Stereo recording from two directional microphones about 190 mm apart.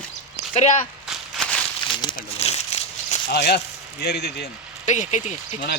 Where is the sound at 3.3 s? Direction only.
60° left (ahead or behind).